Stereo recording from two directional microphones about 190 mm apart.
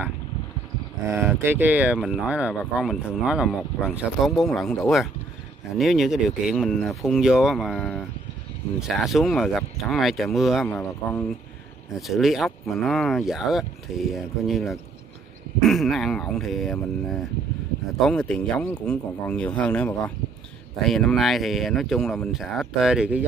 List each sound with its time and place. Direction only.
1.1 s speech: 10° right (ahead or behind); by 19.9 s 5° left (ahead or behind)
20.9 s speech: centre (ahead or behind)